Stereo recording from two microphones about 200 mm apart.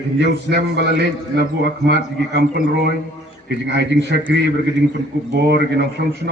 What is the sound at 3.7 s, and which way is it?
Speech, 60° right (ahead or behind).